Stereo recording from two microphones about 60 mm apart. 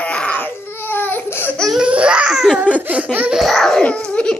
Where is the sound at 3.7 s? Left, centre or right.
Centre.